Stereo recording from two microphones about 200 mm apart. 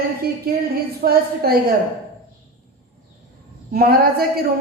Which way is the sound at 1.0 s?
50° right (ahead or behind).